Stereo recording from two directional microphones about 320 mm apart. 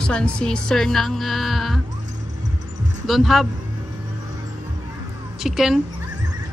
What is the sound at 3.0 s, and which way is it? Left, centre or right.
Speech, centre.